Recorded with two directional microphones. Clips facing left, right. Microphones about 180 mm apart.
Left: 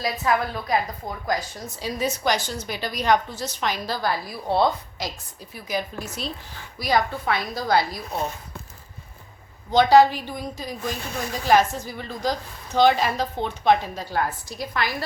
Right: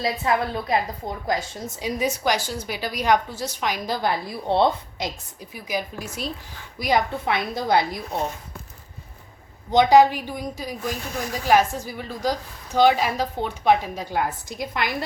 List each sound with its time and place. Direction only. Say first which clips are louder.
0.0 s a woman's voice: right 1 dB; 25° right (ahead or behind)
9.7 s a woman's voice: even; 15° right (ahead or behind)